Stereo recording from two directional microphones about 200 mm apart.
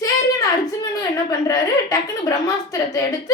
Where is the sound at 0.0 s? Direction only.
15° left (ahead or behind).